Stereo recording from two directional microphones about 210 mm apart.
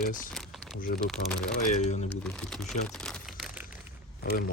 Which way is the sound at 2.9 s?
5° left (ahead or behind).